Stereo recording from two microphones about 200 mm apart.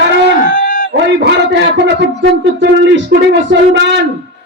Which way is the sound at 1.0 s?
60° right (ahead or behind).